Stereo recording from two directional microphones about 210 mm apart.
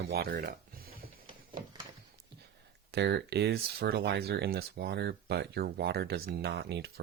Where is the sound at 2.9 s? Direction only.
55° right (ahead or behind).